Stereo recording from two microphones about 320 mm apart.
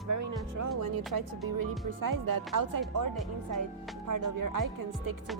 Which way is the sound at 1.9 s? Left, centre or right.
Right.